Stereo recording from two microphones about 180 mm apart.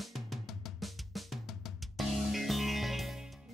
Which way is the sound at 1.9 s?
Centre (ahead or behind).